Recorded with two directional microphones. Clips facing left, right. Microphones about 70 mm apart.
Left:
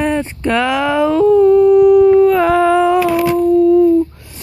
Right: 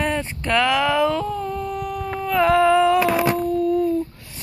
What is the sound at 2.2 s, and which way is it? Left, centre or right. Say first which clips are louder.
Humming: left 7 dB; centre.